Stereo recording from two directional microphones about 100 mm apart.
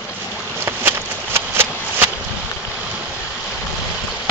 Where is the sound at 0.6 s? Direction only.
25° right (ahead or behind).